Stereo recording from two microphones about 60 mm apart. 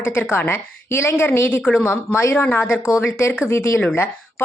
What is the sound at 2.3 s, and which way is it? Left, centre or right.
Speech, left.